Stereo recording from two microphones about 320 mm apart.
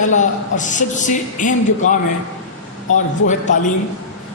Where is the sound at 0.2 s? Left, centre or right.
Left.